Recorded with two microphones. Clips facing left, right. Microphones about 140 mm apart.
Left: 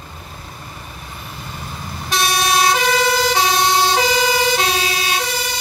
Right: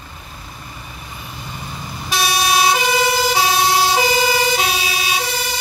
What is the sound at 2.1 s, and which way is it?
Fire engine, 5° right (ahead or behind).